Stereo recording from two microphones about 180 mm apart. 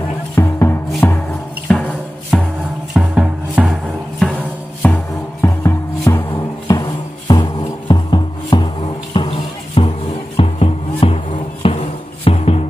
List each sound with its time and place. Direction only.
0.4 s music: 15° left (ahead or behind)
2.9 s music: 5° right (ahead or behind)
4.2 s music: 10° left (ahead or behind); by 12.6 s 35° left (ahead or behind)